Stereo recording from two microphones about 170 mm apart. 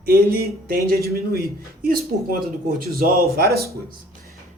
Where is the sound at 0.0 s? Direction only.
65° right (ahead or behind).